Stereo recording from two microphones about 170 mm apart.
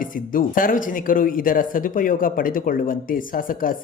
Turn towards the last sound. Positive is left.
turn(degrees=55)  # may be behind; listen again after turning